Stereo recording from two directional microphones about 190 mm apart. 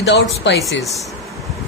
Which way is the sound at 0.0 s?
70° left (ahead or behind).